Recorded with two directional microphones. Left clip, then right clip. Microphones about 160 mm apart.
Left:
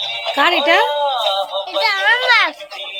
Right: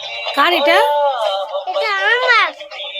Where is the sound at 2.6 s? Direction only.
10° left (ahead or behind).